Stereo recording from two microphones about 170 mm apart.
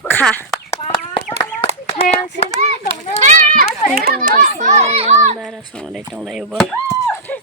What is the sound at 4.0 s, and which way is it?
A child's voice, 60° right (ahead or behind).